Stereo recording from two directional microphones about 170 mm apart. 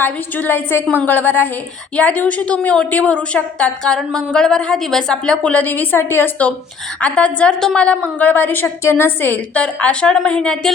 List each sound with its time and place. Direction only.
0.0 s a woman's voice: 10° left (ahead or behind)